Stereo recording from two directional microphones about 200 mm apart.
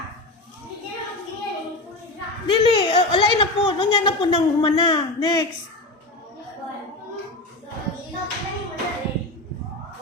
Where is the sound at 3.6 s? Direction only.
25° left (ahead or behind).